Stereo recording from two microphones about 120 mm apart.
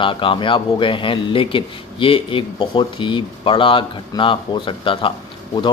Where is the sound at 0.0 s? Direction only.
45° left (ahead or behind).